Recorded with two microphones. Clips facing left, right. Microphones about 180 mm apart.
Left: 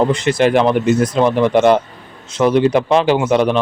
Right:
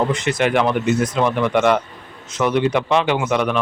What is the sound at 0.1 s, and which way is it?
Speech, 30° left (ahead or behind).